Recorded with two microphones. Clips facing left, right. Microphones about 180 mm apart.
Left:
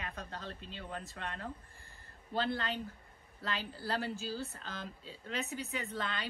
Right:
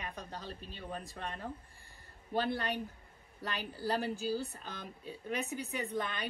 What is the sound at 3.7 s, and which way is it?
A woman's voice, 15° right (ahead or behind).